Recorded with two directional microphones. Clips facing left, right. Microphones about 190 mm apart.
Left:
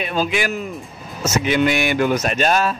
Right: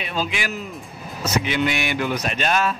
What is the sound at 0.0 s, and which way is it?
Speech, 50° left (ahead or behind).